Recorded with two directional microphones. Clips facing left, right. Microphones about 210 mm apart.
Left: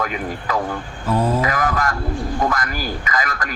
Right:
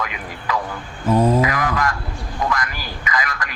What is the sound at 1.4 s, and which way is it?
A man's voice, 45° left (ahead or behind).